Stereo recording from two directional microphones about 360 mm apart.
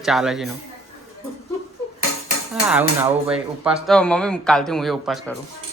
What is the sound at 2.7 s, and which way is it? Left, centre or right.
Speech, centre.